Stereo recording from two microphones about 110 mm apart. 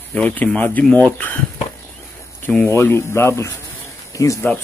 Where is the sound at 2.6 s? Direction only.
25° left (ahead or behind).